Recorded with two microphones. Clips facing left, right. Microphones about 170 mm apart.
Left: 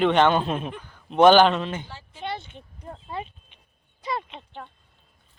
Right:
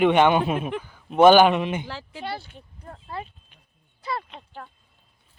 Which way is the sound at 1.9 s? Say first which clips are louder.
Right 7 dB; 90° right.